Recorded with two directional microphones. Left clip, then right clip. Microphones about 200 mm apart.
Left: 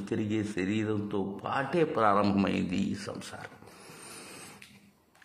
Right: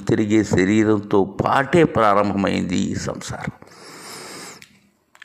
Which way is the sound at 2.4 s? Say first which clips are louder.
Right 9 dB; 30° right (ahead or behind).